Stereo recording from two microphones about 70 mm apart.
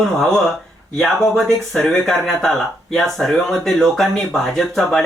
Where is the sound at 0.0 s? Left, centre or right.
Centre.